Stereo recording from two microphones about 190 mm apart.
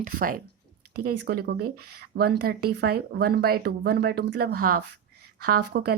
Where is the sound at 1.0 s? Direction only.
55° right (ahead or behind).